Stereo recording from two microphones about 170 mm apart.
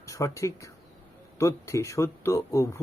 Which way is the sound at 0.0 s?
20° left (ahead or behind).